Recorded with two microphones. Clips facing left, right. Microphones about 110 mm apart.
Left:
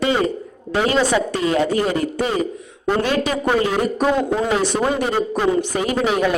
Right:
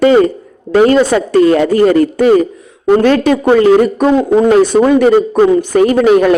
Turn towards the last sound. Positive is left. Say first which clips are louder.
# right 11 dB
turn(degrees=-55)  # may be behind; listen again after turning